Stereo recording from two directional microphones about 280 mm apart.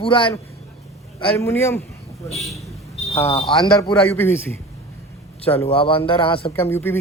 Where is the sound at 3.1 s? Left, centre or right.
Left.